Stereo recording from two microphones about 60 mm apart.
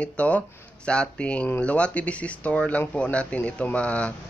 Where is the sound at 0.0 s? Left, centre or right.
Left.